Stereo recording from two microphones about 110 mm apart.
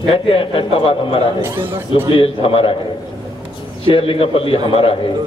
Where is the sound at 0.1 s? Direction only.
60° left (ahead or behind).